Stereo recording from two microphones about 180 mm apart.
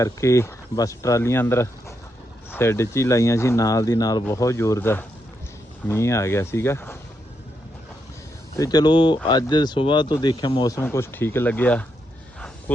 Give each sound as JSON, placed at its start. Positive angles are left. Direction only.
{"t": 0.0, "sound": "speech", "side_deg": 15}
{"t": 8.5, "sound": "speech", "side_deg": 20}